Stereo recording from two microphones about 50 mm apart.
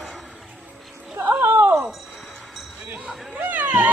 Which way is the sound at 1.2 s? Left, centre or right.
Right.